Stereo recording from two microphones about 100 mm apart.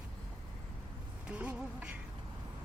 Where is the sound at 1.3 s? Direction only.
15° right (ahead or behind).